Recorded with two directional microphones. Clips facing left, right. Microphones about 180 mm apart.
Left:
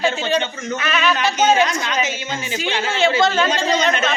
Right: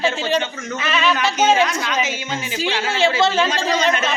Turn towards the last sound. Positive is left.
turn(degrees=-5)  # may be behind; listen again after turning